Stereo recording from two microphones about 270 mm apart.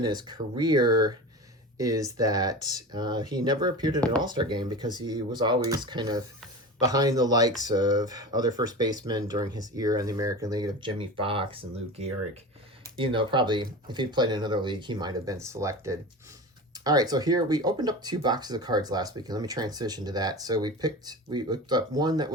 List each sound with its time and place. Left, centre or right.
0.0 s speech: centre